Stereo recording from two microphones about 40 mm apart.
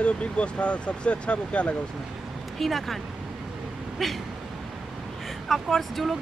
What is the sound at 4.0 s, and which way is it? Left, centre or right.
Speech, centre.